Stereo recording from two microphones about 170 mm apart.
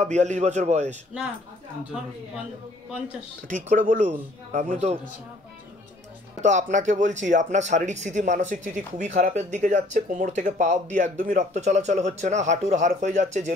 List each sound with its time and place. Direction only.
0.0 s a man's voice: 40° right (ahead or behind)
3.4 s speech: 50° right (ahead or behind)
6.4 s speech: 45° right (ahead or behind)